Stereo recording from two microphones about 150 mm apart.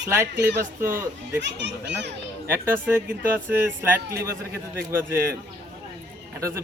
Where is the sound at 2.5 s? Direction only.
15° right (ahead or behind).